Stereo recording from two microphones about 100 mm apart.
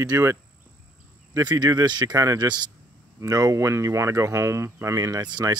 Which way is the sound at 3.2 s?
35° right (ahead or behind).